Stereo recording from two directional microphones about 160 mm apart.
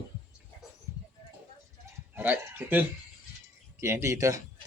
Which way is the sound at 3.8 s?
15° right (ahead or behind).